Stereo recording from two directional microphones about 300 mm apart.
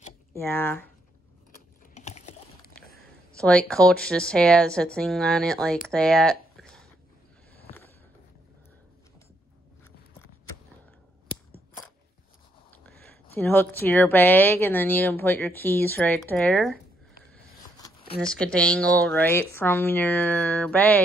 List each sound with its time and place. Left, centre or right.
0.4 s speech: centre
2.0 s typing: left
3.3 s a woman's voice: centre
13.3 s a woman's voice: centre